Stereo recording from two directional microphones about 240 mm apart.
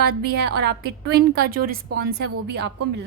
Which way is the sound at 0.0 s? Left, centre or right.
Right.